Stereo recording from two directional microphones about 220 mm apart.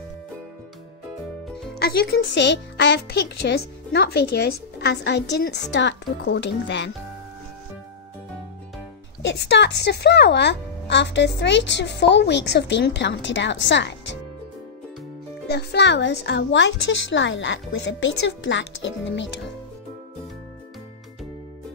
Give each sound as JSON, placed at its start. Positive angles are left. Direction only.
{"t": 1.8, "sound": "a child's voice", "side_deg": 45}
{"t": 9.2, "sound": "a child's voice", "side_deg": 55}
{"t": 15.4, "sound": "a child's voice", "side_deg": 50}